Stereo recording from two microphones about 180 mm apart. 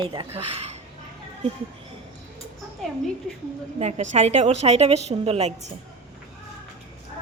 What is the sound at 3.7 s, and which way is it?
A woman's voice, 35° right (ahead or behind).